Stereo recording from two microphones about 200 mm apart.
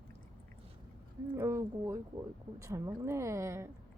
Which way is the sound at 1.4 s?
15° right (ahead or behind).